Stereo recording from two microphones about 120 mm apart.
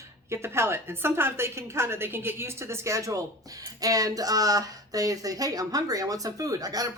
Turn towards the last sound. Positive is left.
turn(degrees=-30)  # may be behind; listen again after turning